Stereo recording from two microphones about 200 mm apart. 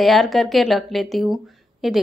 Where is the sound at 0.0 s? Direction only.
Centre (ahead or behind).